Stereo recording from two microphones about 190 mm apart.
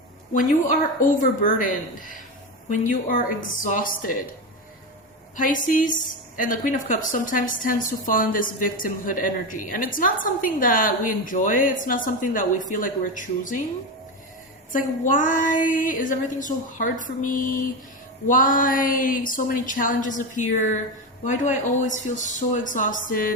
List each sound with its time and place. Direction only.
0.3 s a woman's voice: 45° left (ahead or behind)
5.6 s a woman's voice: 45° left (ahead or behind)
14.7 s a woman's voice: 45° left (ahead or behind)